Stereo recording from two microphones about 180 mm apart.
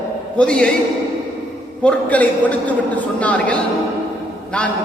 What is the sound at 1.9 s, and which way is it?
A man's voice, 10° left (ahead or behind).